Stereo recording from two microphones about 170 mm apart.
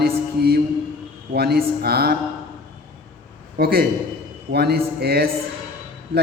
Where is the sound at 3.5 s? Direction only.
60° right (ahead or behind).